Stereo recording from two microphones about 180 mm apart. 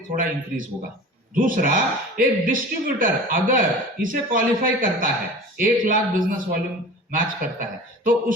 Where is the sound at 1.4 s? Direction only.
50° right (ahead or behind).